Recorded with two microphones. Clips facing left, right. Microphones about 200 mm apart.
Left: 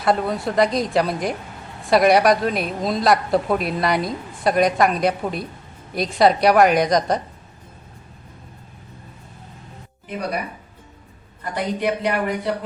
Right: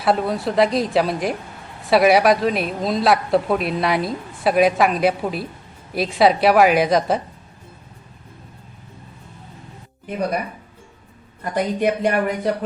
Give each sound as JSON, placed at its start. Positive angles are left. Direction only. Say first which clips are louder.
{"t": 0.0, "sound": "a woman's voice", "louder": "right 1 dB", "side_deg": 0}
{"t": 11.5, "sound": "speech", "louder": "right 3 dB", "side_deg": -50}